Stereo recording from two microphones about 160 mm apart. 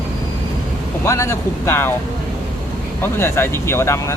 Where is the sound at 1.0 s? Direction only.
20° left (ahead or behind).